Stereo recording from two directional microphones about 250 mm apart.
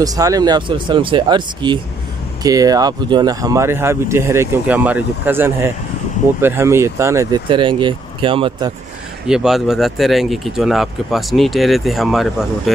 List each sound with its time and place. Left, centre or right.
0.0 s speech: centre
9.3 s speech: centre